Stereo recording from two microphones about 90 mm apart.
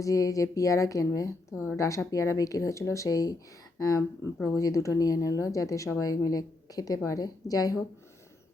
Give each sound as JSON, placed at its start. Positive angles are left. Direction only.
{"t": 0.0, "sound": "speech", "side_deg": 40}